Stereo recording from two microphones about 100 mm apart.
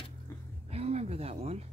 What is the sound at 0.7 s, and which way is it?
Speech, 90° right.